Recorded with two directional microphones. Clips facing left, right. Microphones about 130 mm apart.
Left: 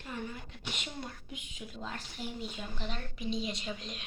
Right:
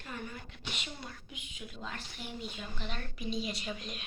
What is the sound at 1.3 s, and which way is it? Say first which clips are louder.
A woman's voice: left 2 dB; 40° left (ahead or behind).